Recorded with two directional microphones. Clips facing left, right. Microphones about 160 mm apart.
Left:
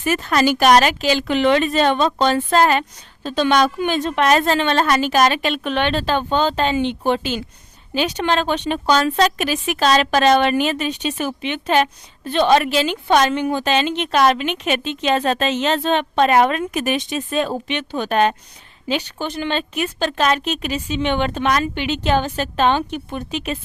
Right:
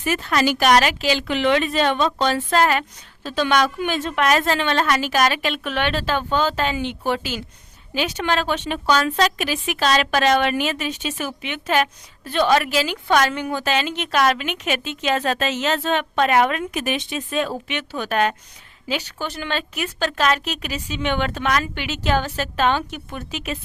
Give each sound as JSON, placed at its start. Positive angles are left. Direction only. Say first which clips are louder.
{"t": 0.0, "sound": "a woman's voice", "louder": "left 3 dB", "side_deg": 45}